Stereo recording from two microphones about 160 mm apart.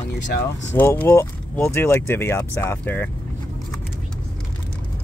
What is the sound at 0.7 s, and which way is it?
Speech, 10° left (ahead or behind).